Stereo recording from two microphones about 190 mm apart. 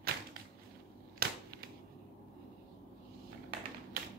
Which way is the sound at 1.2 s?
50° right (ahead or behind).